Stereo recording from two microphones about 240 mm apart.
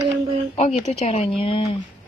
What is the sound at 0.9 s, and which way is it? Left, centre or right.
Speech, left.